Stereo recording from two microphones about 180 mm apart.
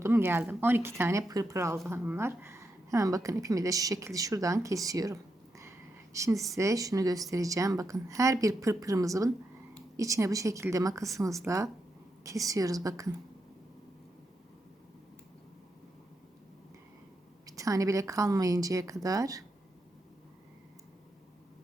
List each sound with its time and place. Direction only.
0.0 s a sound: 15° right (ahead or behind)
0.6 s a woman's voice: 15° right (ahead or behind)
6.1 s a woman's voice: 15° right (ahead or behind)
17.4 s a woman's voice: 20° right (ahead or behind)